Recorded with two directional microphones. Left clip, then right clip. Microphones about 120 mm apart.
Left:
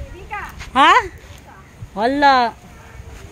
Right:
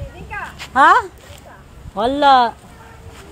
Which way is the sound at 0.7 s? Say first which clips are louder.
Right 1 dB; 90° left.